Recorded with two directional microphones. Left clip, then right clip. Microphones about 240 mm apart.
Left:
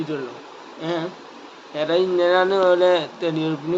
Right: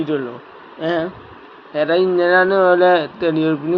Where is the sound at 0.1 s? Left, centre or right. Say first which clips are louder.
Right 6 dB; right.